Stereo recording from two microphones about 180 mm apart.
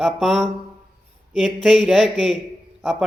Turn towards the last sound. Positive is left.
turn(degrees=0)  # may be behind; listen again after turning